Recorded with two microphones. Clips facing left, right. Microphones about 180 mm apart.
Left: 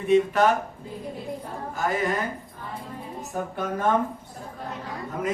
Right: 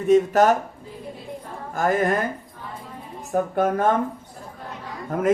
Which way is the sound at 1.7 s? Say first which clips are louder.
Right 5 dB; 50° right (ahead or behind).